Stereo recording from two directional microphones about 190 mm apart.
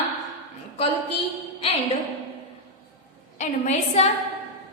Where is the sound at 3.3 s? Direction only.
35° left (ahead or behind).